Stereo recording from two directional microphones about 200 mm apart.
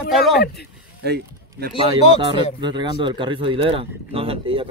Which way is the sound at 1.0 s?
55° right (ahead or behind).